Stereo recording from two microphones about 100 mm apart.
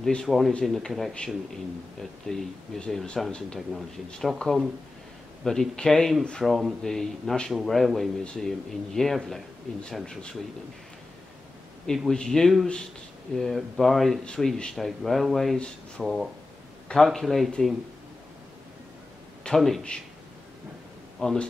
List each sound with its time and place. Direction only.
0.0 s speech: 5° left (ahead or behind)
11.8 s speech: 5° left (ahead or behind)
19.4 s speech: 5° left (ahead or behind)
21.2 s a man's voice: 5° left (ahead or behind)